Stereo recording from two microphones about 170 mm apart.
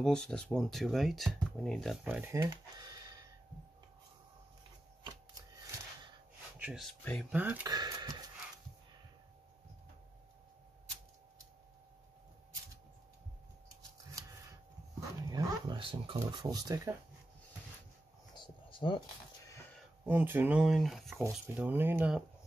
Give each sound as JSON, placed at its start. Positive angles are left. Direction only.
{"t": 0.0, "sound": "speech", "side_deg": 5}
{"t": 2.0, "sound": "speech", "side_deg": -10}
{"t": 6.6, "sound": "speech", "side_deg": 0}
{"t": 7.3, "sound": "speech", "side_deg": -10}
{"t": 7.6, "sound": "a sound", "side_deg": -25}
{"t": 15.0, "sound": "speech", "side_deg": -25}
{"t": 18.3, "sound": "a sound", "side_deg": 30}
{"t": 20.1, "sound": "speech", "side_deg": -10}